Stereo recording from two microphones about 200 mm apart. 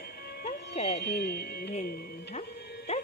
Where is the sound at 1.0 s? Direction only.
55° left (ahead or behind).